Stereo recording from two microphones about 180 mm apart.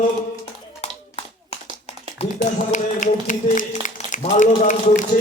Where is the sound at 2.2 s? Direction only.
35° left (ahead or behind).